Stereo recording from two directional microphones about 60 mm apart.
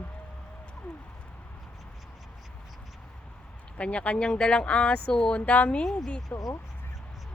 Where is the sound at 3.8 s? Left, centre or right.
Centre.